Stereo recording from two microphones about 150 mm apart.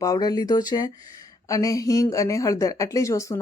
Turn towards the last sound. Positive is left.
turn(degrees=20)  # may be behind; listen again after turning